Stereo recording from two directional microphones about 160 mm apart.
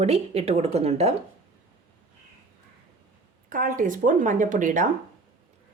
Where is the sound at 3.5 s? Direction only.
60° right (ahead or behind).